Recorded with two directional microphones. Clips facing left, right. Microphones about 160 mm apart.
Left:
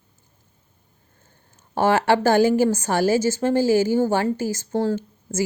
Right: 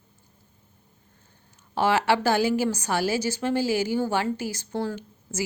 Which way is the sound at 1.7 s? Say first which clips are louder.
Left 4 dB; 50° left (ahead or behind).